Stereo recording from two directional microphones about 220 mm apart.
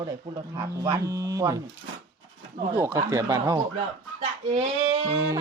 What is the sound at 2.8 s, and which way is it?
Speech, 15° right (ahead or behind).